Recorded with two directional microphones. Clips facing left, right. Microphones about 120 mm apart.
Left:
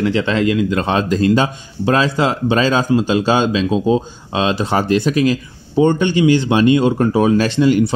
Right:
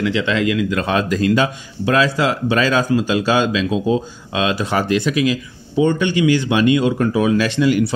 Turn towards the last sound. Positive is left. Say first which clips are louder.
# left 2 dB
turn(degrees=30)  # may be behind; listen again after turning